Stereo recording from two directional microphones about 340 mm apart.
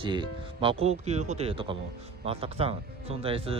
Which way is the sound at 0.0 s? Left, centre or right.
Centre.